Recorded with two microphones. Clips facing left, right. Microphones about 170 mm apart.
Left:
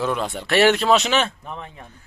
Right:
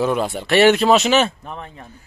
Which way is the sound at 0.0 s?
10° right (ahead or behind).